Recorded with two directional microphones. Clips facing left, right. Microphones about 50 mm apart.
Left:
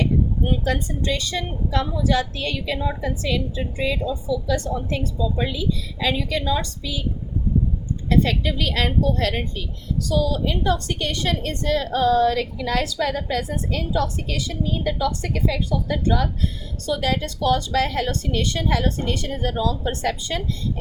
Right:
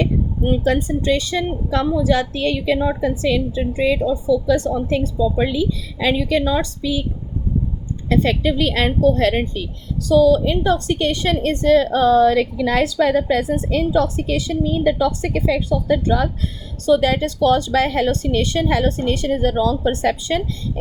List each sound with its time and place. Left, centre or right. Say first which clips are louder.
0.0 s a woman's voice: right 2 dB; right
8.1 s a woman's voice: right 3 dB; right